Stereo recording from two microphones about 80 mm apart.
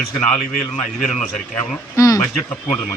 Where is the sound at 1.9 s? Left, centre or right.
Left.